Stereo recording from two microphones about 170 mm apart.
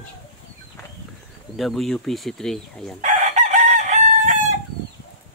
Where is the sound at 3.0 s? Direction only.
45° right (ahead or behind).